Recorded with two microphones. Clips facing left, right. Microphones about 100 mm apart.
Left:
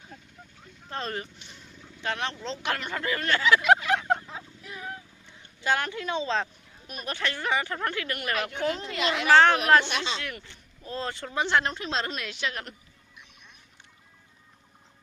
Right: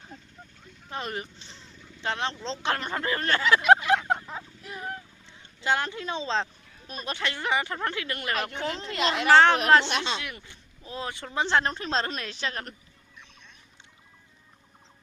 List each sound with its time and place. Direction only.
0.9 s speech: 15° right (ahead or behind)
4.7 s boat: 40° right (ahead or behind)
5.5 s a woman's voice: 25° right (ahead or behind); by 9.2 s 40° right (ahead or behind)
9.3 s speech: 25° right (ahead or behind)
11.3 s a woman's voice: 30° right (ahead or behind)